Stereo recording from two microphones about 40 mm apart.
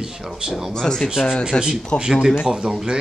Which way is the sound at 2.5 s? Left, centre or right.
Centre.